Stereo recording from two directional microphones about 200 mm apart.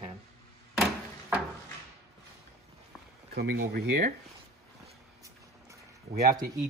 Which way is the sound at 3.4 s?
50° right (ahead or behind).